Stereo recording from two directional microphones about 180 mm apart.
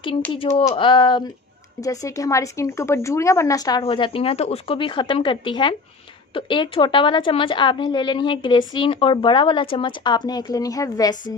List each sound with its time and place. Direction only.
0.3 s a woman's voice: 30° left (ahead or behind)